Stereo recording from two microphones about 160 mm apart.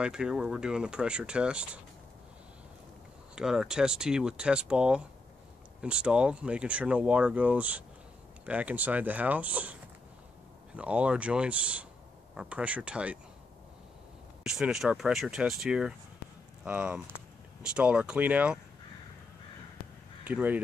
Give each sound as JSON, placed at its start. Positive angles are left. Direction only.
{"t": 0.0, "sound": "speech", "side_deg": -5}
{"t": 3.3, "sound": "speech", "side_deg": -5}
{"t": 10.8, "sound": "speech", "side_deg": -10}
{"t": 14.4, "sound": "speech", "side_deg": -5}
{"t": 20.2, "sound": "speech", "side_deg": -10}